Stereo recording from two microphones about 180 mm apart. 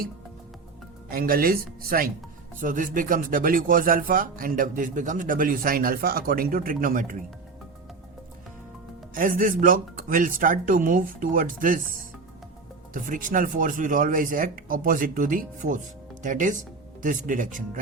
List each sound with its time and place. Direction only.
1.1 s a man's voice: 55° right (ahead or behind)
9.1 s a man's voice: 50° right (ahead or behind)